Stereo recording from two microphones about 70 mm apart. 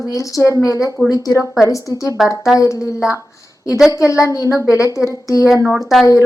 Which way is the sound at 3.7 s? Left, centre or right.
Centre.